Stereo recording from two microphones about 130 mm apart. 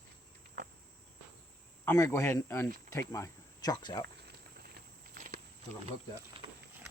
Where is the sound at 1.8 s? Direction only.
20° left (ahead or behind).